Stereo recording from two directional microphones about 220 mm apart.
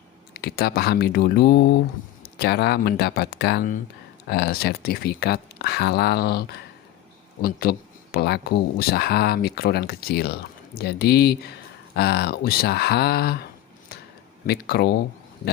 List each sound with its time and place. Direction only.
0.3 s speech: 45° left (ahead or behind)